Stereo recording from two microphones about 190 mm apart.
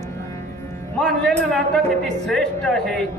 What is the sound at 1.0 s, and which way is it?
A man's voice, 5° left (ahead or behind).